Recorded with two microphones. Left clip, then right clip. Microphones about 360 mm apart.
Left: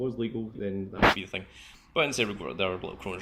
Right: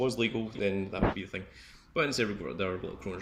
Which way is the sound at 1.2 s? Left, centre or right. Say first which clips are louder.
Left 4 dB; centre.